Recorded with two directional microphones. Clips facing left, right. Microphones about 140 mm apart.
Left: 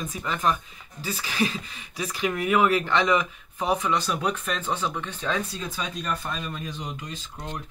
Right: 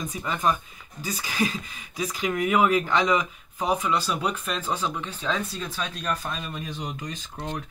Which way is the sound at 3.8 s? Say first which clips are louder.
Even; 10° right (ahead or behind).